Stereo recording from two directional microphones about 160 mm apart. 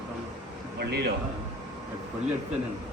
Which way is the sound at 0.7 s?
85° right.